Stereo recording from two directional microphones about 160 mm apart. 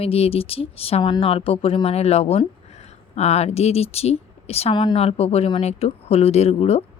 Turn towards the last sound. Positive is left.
turn(degrees=40)  # may be behind; listen again after turning